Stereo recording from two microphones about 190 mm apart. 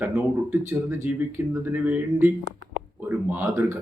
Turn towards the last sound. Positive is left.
turn(degrees=-10)  # may be behind; listen again after turning